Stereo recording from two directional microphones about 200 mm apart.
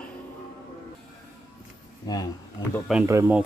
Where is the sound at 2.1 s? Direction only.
20° left (ahead or behind).